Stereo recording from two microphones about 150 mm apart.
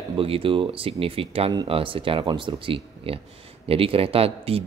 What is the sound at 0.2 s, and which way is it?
Speech, 40° right (ahead or behind).